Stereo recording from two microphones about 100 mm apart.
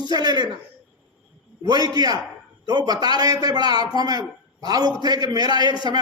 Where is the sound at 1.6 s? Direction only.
40° right (ahead or behind).